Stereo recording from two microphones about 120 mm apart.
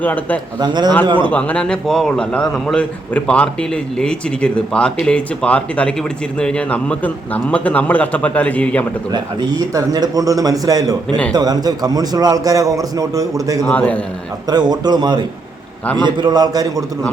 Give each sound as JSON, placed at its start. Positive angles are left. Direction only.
{"t": 0.0, "sound": "a man's voice", "side_deg": 15}
{"t": 0.6, "sound": "a man's voice", "side_deg": -35}
{"t": 1.3, "sound": "a man's voice", "side_deg": 10}
{"t": 9.1, "sound": "a man's voice", "side_deg": -35}
{"t": 13.7, "sound": "a man's voice", "side_deg": 10}
{"t": 14.5, "sound": "a man's voice", "side_deg": -35}